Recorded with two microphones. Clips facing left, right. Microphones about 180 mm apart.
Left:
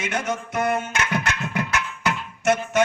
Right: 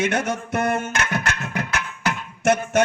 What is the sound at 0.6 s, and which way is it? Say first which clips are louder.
Music: even; 45° right (ahead or behind).